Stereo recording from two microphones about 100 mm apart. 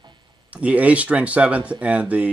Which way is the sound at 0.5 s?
15° right (ahead or behind).